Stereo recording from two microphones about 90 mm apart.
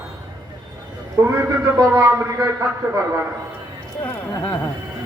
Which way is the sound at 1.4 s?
35° right (ahead or behind).